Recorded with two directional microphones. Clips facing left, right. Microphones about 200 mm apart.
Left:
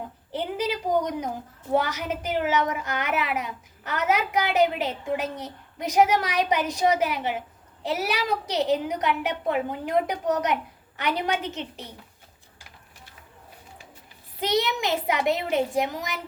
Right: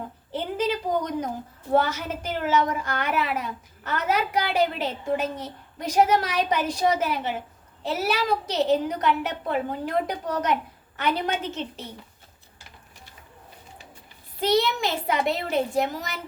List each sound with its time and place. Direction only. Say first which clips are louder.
0.3 s a sound: right 1 dB; 15° left (ahead or behind)
1.7 s a woman's voice: right 2 dB; 15° left (ahead or behind)
14.4 s a woman's voice: right 2 dB; 20° left (ahead or behind)